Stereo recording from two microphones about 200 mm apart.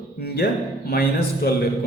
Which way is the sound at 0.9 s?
50° left (ahead or behind).